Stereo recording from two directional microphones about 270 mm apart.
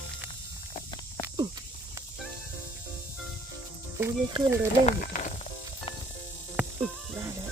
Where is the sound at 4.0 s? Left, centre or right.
Centre.